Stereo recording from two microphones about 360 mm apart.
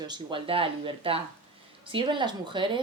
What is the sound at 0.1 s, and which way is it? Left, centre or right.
A woman's voice, centre.